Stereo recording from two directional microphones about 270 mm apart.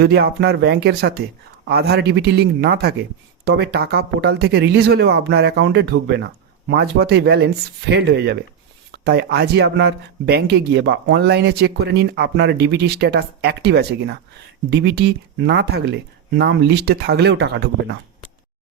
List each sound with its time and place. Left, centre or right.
0.0 s a man's voice: right